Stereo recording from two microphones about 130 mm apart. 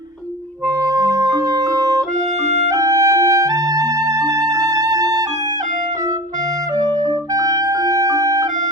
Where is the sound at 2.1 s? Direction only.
65° right (ahead or behind).